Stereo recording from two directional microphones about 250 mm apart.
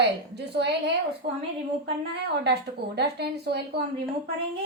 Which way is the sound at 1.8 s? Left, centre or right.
Right.